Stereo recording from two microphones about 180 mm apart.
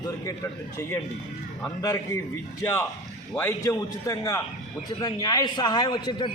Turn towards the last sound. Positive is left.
turn(degrees=25)  # may be behind; listen again after turning